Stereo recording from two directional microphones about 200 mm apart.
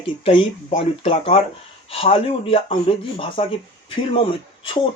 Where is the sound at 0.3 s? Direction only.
30° left (ahead or behind).